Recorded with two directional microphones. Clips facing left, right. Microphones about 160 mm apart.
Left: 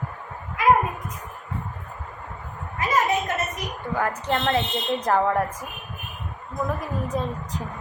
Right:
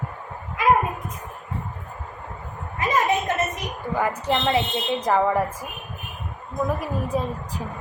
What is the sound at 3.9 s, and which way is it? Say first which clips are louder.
A woman's voice: right 2 dB; 10° right (ahead or behind).